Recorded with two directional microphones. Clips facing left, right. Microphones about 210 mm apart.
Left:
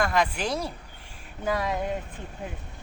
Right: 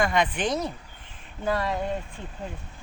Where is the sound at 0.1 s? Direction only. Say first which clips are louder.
Right 1 dB; 5° left (ahead or behind).